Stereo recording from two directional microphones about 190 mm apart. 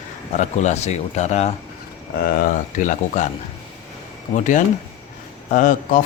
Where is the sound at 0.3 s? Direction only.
35° left (ahead or behind).